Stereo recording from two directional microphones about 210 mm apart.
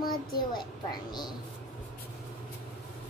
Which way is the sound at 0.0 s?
20° left (ahead or behind).